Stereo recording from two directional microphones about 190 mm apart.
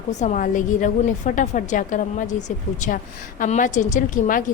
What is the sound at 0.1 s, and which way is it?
A woman's voice, 40° left (ahead or behind).